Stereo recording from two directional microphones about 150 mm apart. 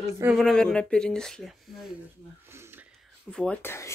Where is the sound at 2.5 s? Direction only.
15° right (ahead or behind).